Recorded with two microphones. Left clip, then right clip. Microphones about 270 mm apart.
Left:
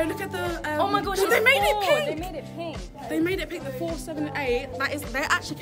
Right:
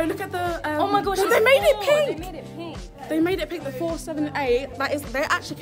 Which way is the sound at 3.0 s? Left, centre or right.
Centre.